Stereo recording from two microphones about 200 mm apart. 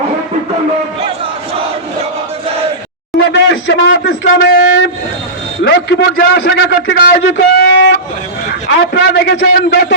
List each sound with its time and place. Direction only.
3.2 s a man's voice: 70° left (ahead or behind)